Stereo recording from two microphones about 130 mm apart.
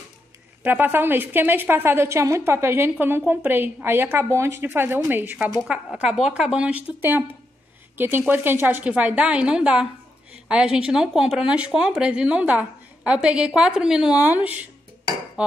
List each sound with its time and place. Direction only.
0.7 s a woman's voice: 15° right (ahead or behind)
15.4 s hammer: 10° right (ahead or behind)